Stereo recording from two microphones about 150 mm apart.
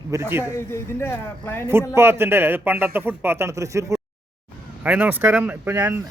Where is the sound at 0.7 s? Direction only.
15° left (ahead or behind).